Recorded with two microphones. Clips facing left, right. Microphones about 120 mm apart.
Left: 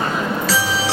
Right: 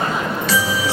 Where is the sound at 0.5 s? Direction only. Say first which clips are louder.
Right 3 dB; 75° left (ahead or behind).